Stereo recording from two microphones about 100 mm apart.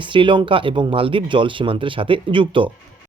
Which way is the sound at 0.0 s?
55° right (ahead or behind).